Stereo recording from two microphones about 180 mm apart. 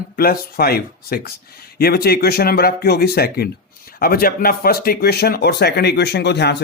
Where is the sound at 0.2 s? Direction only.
55° left (ahead or behind).